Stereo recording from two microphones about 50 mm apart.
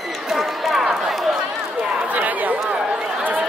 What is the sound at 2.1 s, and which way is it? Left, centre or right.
Chatter, right.